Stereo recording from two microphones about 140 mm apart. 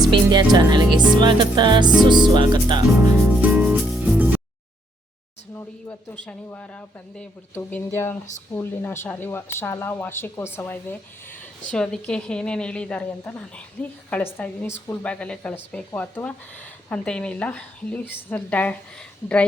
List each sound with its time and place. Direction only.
0.0 s music: 30° right (ahead or behind)
0.5 s speech: 30° right (ahead or behind)
3.2 s music: 10° right (ahead or behind)
5.5 s speech: 15° left (ahead or behind)